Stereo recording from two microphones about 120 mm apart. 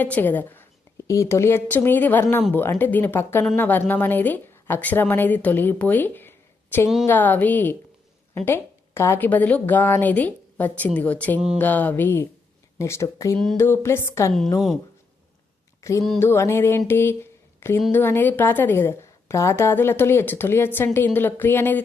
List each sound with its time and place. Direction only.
0.0 s a woman's voice: 15° left (ahead or behind)
15.8 s a sound: 25° left (ahead or behind)
16.2 s a woman's voice: 20° left (ahead or behind)